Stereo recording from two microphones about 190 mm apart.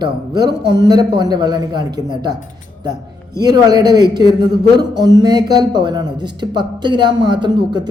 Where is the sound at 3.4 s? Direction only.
20° right (ahead or behind).